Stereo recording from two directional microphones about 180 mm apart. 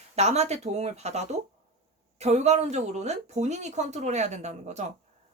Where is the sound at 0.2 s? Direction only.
35° right (ahead or behind).